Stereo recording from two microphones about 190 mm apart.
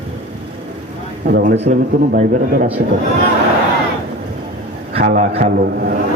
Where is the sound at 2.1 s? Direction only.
50° right (ahead or behind).